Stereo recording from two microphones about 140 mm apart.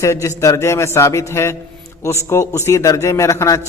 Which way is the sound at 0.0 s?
20° left (ahead or behind).